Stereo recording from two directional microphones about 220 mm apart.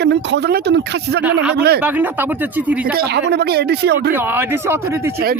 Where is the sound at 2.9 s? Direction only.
50° right (ahead or behind).